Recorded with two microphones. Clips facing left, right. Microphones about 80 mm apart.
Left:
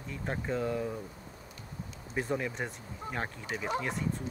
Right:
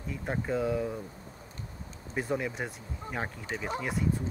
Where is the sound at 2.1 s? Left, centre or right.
Centre.